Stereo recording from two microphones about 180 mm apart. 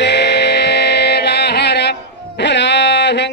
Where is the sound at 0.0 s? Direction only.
70° left (ahead or behind).